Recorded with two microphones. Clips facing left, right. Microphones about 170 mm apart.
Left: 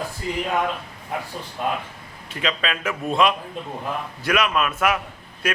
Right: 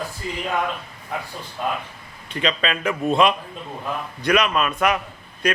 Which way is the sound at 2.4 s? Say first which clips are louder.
Right 3 dB; 5° left (ahead or behind).